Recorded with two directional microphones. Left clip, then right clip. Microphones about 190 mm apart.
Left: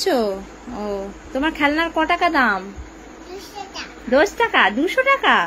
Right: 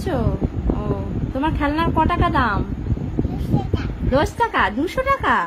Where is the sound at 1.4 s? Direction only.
5° left (ahead or behind).